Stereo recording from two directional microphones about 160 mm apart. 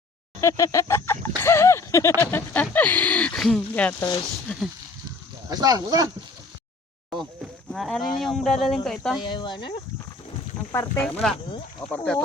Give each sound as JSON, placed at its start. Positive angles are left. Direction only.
{"t": 0.4, "sound": "speech", "side_deg": 20}
{"t": 5.5, "sound": "speech", "side_deg": -25}
{"t": 7.1, "sound": "speech", "side_deg": 0}
{"t": 9.2, "sound": "speech", "side_deg": 30}
{"t": 10.7, "sound": "speech", "side_deg": 15}
{"t": 11.0, "sound": "speech", "side_deg": 5}